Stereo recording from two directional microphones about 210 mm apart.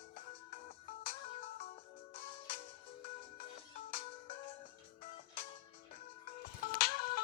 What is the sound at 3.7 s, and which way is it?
Music, 40° left (ahead or behind).